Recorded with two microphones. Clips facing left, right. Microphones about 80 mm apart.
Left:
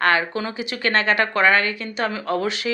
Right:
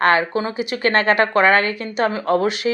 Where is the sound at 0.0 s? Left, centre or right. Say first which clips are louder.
Right 3 dB; right.